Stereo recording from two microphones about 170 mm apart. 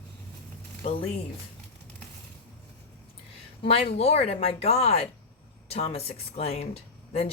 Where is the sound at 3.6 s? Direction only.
35° left (ahead or behind).